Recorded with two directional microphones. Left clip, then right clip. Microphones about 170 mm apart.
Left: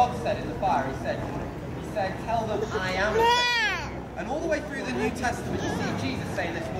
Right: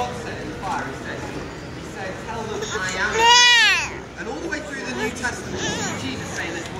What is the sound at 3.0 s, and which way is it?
Baby cry, 25° left (ahead or behind).